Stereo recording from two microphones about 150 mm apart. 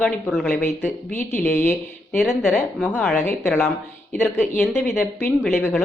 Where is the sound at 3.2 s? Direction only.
15° left (ahead or behind).